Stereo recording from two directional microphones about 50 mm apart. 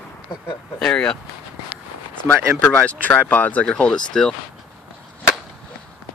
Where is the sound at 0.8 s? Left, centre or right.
Centre.